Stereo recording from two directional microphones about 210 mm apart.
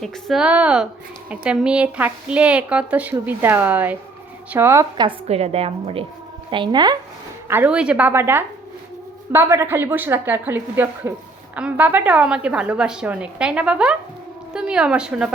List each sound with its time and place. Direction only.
0.0 s a woman's voice: centre (ahead or behind); by 6.9 s 20° right (ahead or behind)
7.4 s a woman's voice: 10° right (ahead or behind)